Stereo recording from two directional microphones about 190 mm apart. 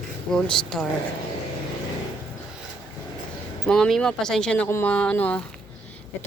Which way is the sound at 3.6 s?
5° left (ahead or behind).